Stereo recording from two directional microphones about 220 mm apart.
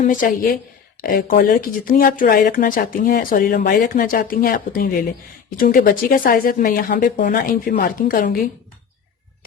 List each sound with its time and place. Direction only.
0.0 s speech: 35° left (ahead or behind)